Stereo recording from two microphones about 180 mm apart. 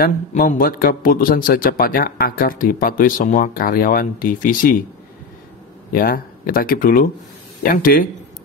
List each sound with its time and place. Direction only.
0.0 s a man's voice: 45° left (ahead or behind)
5.9 s a man's voice: 50° left (ahead or behind)